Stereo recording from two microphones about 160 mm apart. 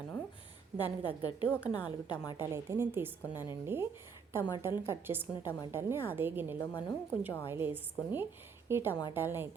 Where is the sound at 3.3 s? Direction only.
30° left (ahead or behind).